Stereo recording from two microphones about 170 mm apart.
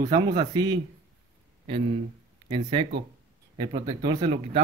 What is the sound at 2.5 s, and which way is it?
Speech, 30° right (ahead or behind).